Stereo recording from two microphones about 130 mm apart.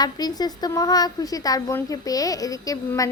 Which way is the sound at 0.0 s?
30° left (ahead or behind).